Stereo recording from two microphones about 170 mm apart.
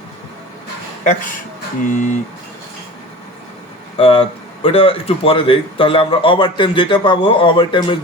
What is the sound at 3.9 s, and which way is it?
A man's voice, 35° left (ahead or behind).